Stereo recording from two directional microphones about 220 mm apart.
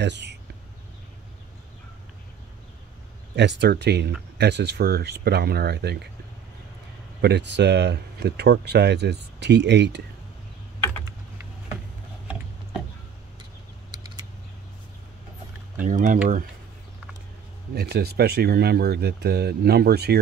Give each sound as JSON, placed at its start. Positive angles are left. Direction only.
{"t": 0.0, "sound": "speech", "side_deg": -50}
{"t": 3.3, "sound": "speech", "side_deg": -50}
{"t": 7.2, "sound": "speech", "side_deg": -50}
{"t": 15.8, "sound": "speech", "side_deg": -35}
{"t": 17.7, "sound": "speech", "side_deg": -45}